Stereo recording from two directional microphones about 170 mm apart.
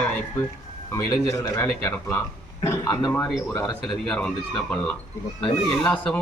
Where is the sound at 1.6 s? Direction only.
15° left (ahead or behind).